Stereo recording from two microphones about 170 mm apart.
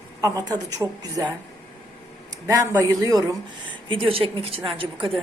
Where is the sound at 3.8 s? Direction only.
30° right (ahead or behind).